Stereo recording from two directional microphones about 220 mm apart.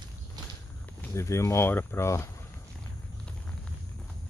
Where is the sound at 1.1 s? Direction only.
15° left (ahead or behind).